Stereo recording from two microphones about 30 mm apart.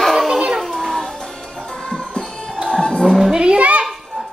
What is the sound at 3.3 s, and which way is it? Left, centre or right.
Speech, right.